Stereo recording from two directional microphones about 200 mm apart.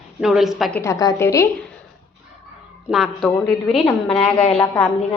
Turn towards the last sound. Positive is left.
turn(degrees=5)  # may be behind; listen again after turning